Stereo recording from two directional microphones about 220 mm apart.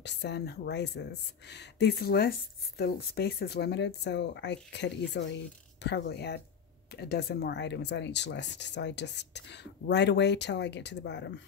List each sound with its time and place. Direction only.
0.0 s speech: 50° left (ahead or behind)